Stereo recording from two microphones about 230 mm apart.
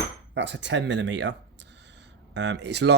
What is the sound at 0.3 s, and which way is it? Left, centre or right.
Speech, right.